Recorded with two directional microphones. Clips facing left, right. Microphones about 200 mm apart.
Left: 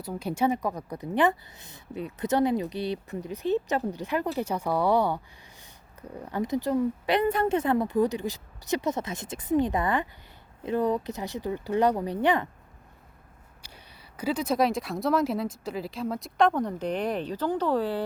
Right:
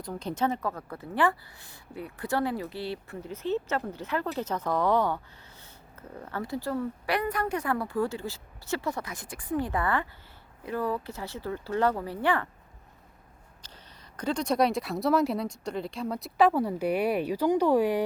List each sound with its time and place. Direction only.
0.0 s a woman's voice: 10° left (ahead or behind)
13.6 s speech: 10° left (ahead or behind); by 18.0 s 15° right (ahead or behind)